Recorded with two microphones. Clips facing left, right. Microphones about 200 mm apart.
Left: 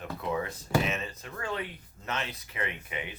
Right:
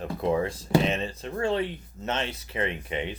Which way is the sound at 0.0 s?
35° right (ahead or behind).